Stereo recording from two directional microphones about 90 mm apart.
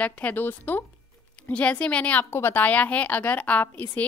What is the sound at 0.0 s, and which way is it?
A woman's voice, 20° left (ahead or behind).